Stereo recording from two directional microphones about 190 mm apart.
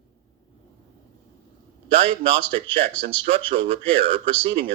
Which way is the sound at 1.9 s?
30° right (ahead or behind).